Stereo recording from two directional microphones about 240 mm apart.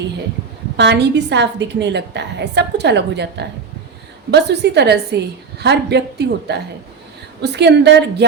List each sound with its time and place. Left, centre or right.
0.8 s a woman's voice: right